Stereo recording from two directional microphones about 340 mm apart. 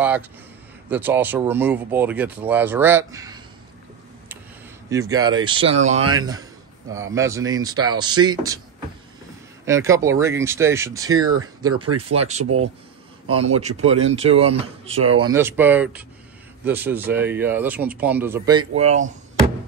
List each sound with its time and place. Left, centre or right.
0.8 s speech: centre
4.8 s speech: centre
9.7 s speech: centre
11.7 s speech: right
13.4 s speech: centre